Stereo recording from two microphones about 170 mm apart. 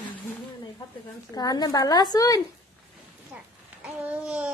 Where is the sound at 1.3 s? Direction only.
25° left (ahead or behind).